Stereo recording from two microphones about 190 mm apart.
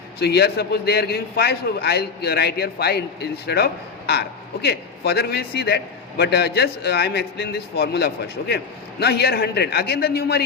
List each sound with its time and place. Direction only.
0.2 s a man's voice: 60° left (ahead or behind)